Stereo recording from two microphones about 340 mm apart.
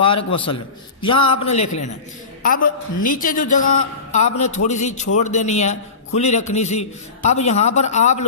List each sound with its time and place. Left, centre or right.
0.0 s a man's voice: centre